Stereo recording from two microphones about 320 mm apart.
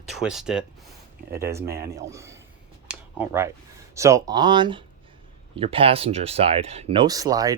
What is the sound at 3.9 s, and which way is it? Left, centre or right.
Speech, centre.